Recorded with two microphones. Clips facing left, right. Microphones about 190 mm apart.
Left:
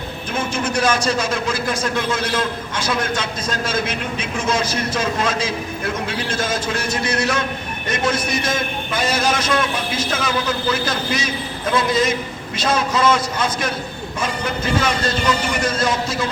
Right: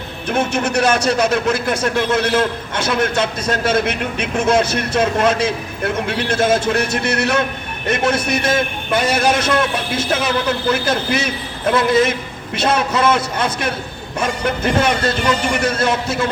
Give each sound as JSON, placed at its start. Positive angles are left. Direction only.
{"t": 0.3, "sound": "a man's voice", "side_deg": -65}